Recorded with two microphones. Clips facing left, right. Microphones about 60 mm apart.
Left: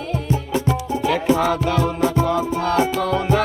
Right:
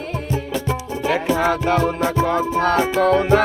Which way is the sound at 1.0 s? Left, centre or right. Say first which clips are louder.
Even; right.